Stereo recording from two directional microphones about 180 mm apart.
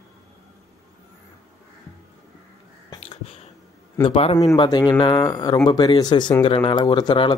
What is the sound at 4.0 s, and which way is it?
A man's voice, 30° left (ahead or behind).